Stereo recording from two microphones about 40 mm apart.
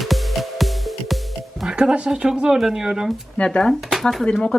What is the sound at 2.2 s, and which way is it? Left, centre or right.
Speech, centre.